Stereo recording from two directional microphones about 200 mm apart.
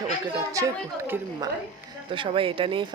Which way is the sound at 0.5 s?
15° right (ahead or behind).